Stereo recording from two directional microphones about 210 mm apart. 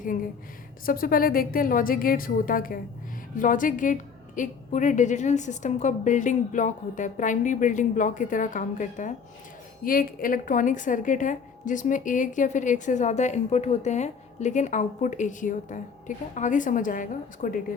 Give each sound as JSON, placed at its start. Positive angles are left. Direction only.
{"t": 0.0, "sound": "a woman's voice", "side_deg": 40}